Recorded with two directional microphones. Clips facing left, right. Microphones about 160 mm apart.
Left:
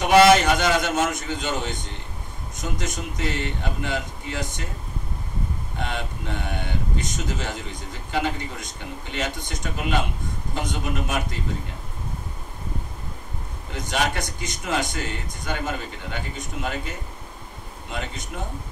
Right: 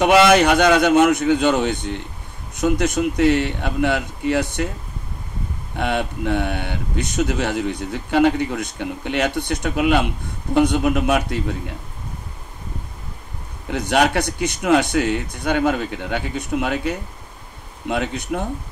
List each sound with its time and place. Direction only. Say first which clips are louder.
0.3 s speech: right 4 dB; 65° right (ahead or behind)
5.8 s speech: right 9 dB; 65° right (ahead or behind)
13.7 s speech: right 8 dB; 65° right (ahead or behind)